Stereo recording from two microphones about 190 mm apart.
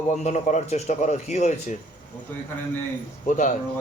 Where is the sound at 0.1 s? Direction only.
35° left (ahead or behind).